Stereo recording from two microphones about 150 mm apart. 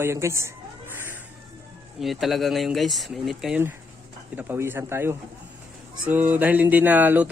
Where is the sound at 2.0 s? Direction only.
Centre (ahead or behind).